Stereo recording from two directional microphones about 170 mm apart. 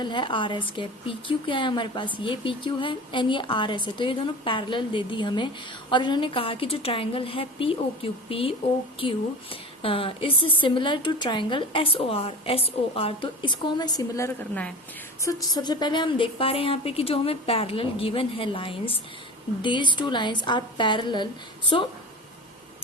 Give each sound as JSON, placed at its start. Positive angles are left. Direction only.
{"t": 0.0, "sound": "a woman's voice", "side_deg": 25}